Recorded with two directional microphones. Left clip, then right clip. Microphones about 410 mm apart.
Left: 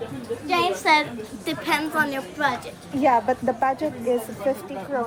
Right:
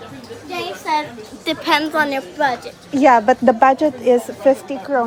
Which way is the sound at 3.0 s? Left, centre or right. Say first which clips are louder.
Right 8 dB; right.